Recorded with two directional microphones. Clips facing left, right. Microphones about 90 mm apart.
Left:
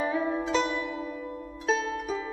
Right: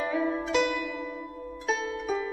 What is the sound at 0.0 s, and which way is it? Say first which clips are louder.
Music: even; 30° left (ahead or behind).